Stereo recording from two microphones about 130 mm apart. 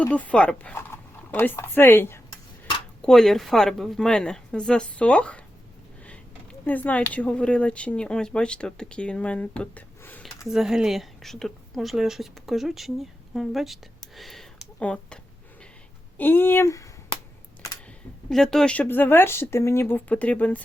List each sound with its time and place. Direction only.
0.0 s speech: 10° left (ahead or behind)
3.0 s a woman's voice: 5° left (ahead or behind)
6.1 s a sound: 10° left (ahead or behind)
7.1 s speech: 10° left (ahead or behind)
10.4 s a woman's voice: 5° right (ahead or behind)
14.2 s a sound: centre (ahead or behind)
16.1 s speech: 15° left (ahead or behind)
18.3 s speech: 5° left (ahead or behind)